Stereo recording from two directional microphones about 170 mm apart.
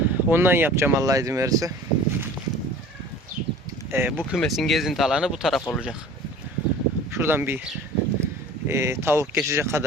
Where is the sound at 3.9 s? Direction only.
10° right (ahead or behind).